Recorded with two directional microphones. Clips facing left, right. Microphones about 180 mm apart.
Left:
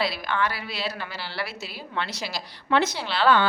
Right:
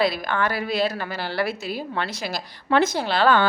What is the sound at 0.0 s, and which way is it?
A woman's voice, 50° right (ahead or behind).